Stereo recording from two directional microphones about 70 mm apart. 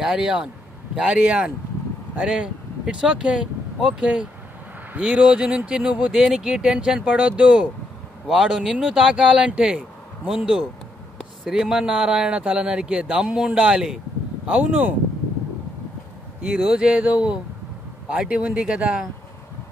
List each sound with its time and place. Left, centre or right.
0.0 s a man's voice: centre
6.1 s a man's voice: centre
8.3 s a man's voice: centre
11.5 s a man's voice: centre
16.4 s a man's voice: centre